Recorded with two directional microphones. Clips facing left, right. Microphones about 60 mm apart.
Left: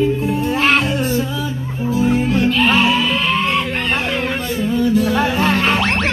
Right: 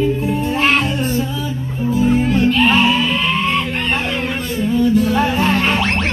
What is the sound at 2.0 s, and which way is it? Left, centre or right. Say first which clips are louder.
Music: right 2 dB; left.